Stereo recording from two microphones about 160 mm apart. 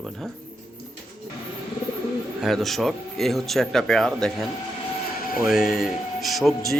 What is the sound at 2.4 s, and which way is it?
Speech, centre (ahead or behind).